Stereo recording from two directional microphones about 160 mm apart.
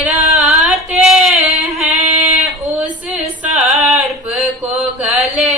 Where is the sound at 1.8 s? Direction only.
40° right (ahead or behind).